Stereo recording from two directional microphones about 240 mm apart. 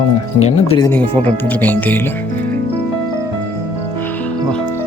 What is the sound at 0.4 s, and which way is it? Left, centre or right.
Speech, left.